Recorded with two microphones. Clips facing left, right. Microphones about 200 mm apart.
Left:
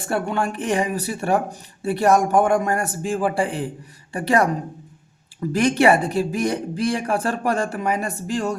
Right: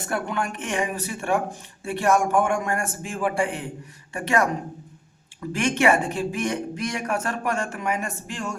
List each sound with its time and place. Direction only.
0.0 s speech: 30° left (ahead or behind)
5.5 s speech: 35° left (ahead or behind)